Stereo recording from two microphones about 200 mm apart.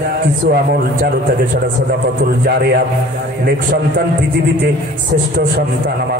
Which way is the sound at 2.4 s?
50° right (ahead or behind).